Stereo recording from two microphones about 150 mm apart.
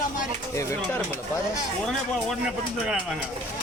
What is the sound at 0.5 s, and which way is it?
Speech, 20° left (ahead or behind).